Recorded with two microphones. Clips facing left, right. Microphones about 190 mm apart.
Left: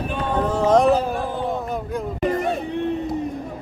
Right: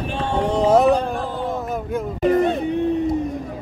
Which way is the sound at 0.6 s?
5° right (ahead or behind).